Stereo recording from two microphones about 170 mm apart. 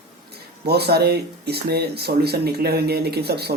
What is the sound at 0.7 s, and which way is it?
Speech, 70° right (ahead or behind).